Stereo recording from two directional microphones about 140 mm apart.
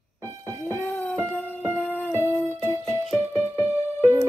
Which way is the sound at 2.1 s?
20° left (ahead or behind).